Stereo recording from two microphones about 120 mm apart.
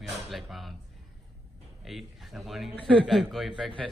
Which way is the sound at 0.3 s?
Centre (ahead or behind).